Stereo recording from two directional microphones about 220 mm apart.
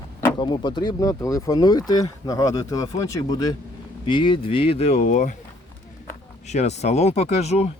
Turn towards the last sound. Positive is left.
turn(degrees=30)  # may be behind; listen again after turning